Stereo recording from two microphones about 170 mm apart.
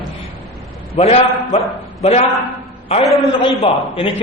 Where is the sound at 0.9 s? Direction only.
35° left (ahead or behind).